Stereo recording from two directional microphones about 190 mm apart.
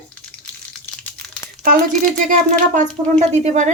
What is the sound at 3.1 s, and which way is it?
Speech, 35° right (ahead or behind).